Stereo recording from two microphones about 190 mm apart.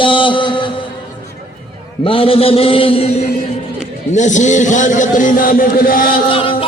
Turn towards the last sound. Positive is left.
turn(degrees=30)  # may be behind; listen again after turning